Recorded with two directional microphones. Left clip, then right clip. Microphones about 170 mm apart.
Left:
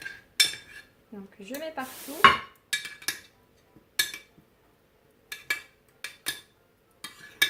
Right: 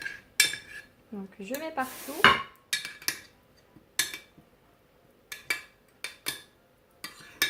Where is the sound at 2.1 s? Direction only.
10° right (ahead or behind).